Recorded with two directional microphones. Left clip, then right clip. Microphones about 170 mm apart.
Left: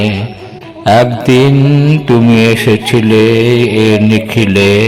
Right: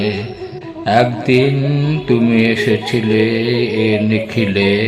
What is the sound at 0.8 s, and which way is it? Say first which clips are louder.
Mantra: left 5 dB; 50° left (ahead or behind).